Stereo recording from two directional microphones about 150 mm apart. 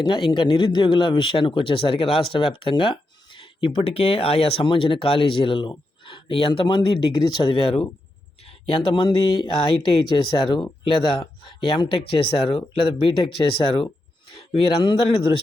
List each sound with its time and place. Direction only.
0.0 s speech: 35° left (ahead or behind)